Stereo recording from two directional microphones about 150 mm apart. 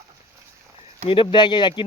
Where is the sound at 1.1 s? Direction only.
35° left (ahead or behind).